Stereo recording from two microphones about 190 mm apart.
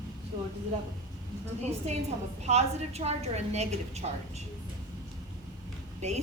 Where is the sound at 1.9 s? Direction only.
35° right (ahead or behind).